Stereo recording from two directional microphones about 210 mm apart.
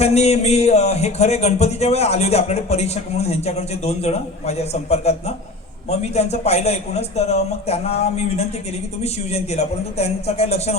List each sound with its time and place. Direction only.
0.0 s speech: 30° left (ahead or behind)